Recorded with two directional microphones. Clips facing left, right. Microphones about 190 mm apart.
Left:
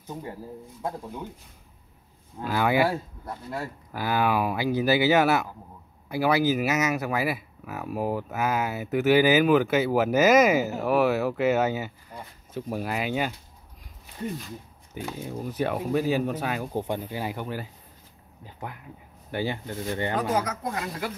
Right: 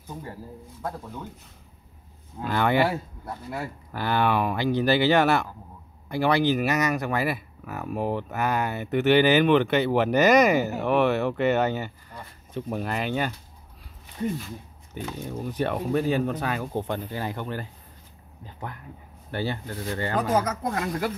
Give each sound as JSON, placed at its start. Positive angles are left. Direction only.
{"t": 2.4, "sound": "speech", "side_deg": 5}
{"t": 3.9, "sound": "speech", "side_deg": 5}
{"t": 15.0, "sound": "speech", "side_deg": 10}
{"t": 20.2, "sound": "speech", "side_deg": -45}